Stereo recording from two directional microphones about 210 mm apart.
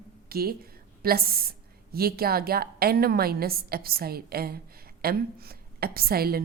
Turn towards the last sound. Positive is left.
turn(degrees=-45)  # may be behind; listen again after turning